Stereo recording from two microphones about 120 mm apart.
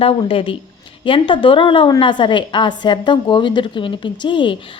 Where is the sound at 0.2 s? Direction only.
45° left (ahead or behind).